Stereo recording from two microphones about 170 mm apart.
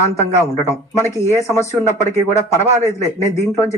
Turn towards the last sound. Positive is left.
turn(degrees=15)  # may be behind; listen again after turning